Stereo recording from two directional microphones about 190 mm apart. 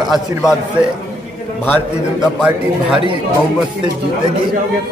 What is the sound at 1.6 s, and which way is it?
Speech, 10° left (ahead or behind).